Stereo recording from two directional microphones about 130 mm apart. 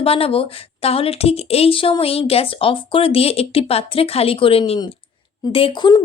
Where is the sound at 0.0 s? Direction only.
50° left (ahead or behind).